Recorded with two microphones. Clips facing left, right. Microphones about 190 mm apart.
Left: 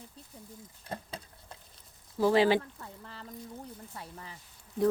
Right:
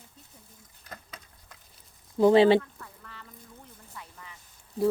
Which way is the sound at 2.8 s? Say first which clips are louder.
Left 3 dB; 30° left (ahead or behind).